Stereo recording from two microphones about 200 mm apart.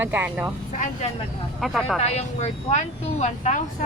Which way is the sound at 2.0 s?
35° left (ahead or behind).